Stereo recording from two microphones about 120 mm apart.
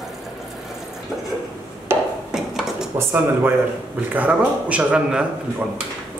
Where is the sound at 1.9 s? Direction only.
20° right (ahead or behind).